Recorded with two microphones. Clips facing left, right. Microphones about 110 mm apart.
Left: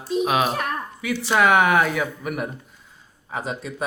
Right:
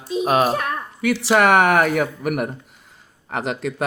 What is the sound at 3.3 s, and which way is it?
Speech, 85° right.